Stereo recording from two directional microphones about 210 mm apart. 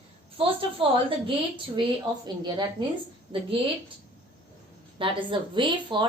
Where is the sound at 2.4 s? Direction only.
20° right (ahead or behind).